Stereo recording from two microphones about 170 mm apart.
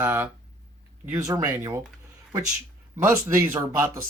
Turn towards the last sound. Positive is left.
turn(degrees=-15)  # may be behind; listen again after turning